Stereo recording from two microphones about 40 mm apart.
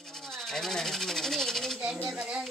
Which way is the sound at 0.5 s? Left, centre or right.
Centre.